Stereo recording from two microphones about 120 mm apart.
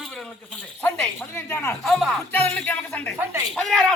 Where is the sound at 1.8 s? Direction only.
Centre (ahead or behind).